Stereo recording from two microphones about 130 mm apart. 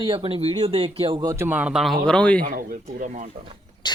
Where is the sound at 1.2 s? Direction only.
25° right (ahead or behind).